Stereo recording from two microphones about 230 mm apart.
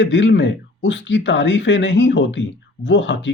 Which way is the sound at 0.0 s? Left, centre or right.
Left.